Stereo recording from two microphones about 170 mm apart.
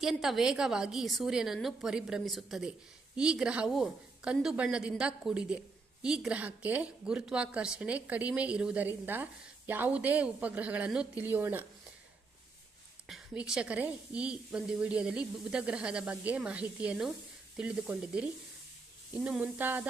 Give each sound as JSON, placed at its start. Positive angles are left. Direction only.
{"t": 0.0, "sound": "a woman's voice", "side_deg": 0}
{"t": 13.1, "sound": "a woman's voice", "side_deg": -5}